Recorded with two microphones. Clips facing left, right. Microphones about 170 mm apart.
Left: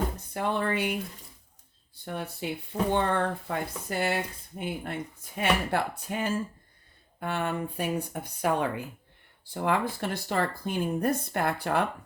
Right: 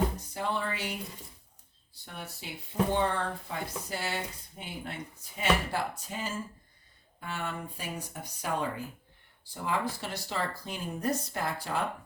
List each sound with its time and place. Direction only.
0.3 s speech: 55° left (ahead or behind)
2.0 s speech: 60° left (ahead or behind)